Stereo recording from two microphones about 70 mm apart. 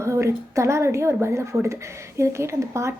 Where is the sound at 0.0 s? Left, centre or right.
Right.